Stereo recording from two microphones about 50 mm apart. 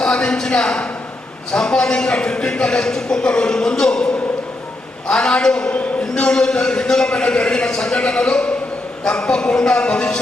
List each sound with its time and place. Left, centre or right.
0.0 s a man's voice: centre